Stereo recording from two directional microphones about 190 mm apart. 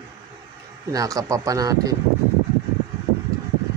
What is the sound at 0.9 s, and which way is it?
Speech, 20° right (ahead or behind).